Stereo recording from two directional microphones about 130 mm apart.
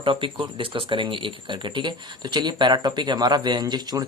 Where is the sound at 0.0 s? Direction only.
40° right (ahead or behind).